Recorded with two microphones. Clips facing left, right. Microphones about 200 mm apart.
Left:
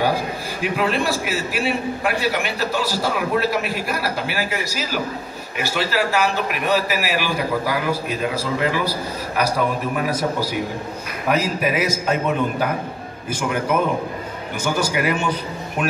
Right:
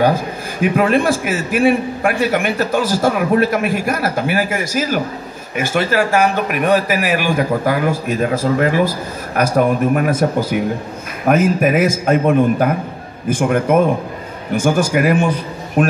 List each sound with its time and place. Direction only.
0.6 s a man's voice: 50° right (ahead or behind)